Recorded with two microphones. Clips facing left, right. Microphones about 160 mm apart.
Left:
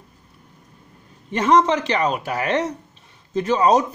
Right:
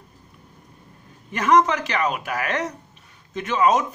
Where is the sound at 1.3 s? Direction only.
30° left (ahead or behind).